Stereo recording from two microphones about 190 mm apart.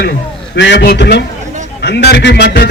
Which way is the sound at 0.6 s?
65° left (ahead or behind).